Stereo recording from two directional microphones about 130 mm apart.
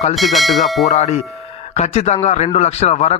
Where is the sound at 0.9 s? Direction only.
55° left (ahead or behind).